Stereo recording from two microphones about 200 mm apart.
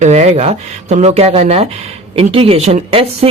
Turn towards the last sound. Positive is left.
turn(degrees=-30)  # may be behind; listen again after turning